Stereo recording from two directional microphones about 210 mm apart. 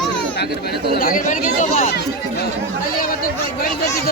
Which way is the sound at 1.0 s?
40° left (ahead or behind).